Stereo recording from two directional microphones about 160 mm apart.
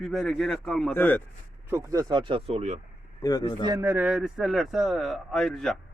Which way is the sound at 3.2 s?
25° left (ahead or behind).